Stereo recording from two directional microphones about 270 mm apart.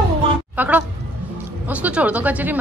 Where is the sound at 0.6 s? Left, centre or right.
Centre.